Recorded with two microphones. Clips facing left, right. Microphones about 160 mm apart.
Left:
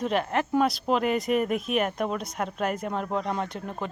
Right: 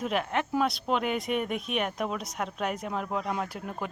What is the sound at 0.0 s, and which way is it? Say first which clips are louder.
Speech: left 3 dB; centre (ahead or behind).